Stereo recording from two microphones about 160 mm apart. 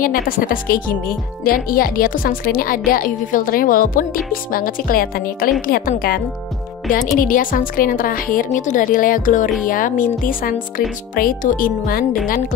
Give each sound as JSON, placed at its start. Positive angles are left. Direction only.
{"t": 0.0, "sound": "speech", "side_deg": 60}